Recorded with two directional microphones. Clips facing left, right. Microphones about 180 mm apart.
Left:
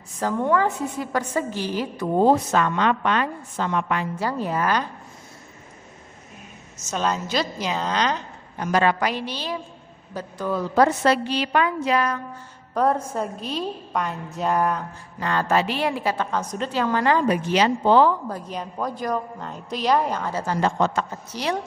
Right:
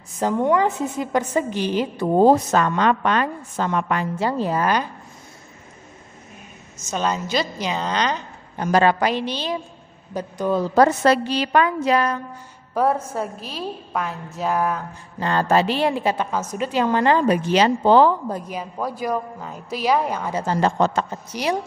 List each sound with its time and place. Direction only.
0.2 s a woman's voice: 20° right (ahead or behind)
2.1 s a woman's voice: 40° right (ahead or behind)
4.2 s a woman's voice: 25° right (ahead or behind)
6.9 s a woman's voice: centre (ahead or behind)
8.5 s a woman's voice: 35° right (ahead or behind); by 10.6 s 20° right (ahead or behind)
10.6 s a woman's voice: 40° right (ahead or behind)
12.7 s a woman's voice: 5° right (ahead or behind)
15.1 s a woman's voice: 30° right (ahead or behind)
16.3 s a woman's voice: 5° right (ahead or behind); by 18.1 s 35° right (ahead or behind)
18.5 s a woman's voice: 5° right (ahead or behind)
20.4 s a woman's voice: 30° right (ahead or behind)
21.3 s a woman's voice: 15° right (ahead or behind)